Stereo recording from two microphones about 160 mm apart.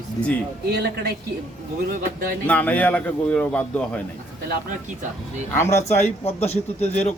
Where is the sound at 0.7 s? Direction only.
90° right.